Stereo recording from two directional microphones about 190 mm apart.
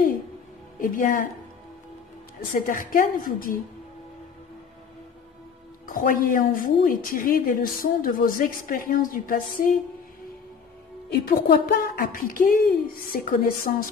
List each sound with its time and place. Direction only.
0.7 s a woman's voice: 45° left (ahead or behind)
2.5 s a woman's voice: 45° left (ahead or behind)
5.9 s a woman's voice: 45° left (ahead or behind)
11.1 s a woman's voice: 55° left (ahead or behind)